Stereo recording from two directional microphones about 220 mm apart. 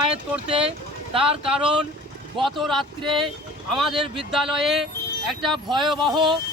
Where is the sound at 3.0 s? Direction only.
20° right (ahead or behind).